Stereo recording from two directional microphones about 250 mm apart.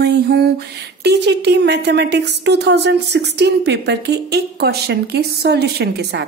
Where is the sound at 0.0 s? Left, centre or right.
Right.